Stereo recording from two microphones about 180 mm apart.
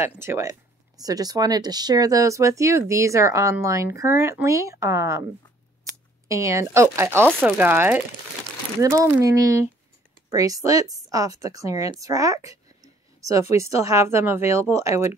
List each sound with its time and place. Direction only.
0.0 s speech: 15° right (ahead or behind)
6.2 s a woman's voice: 15° right (ahead or behind)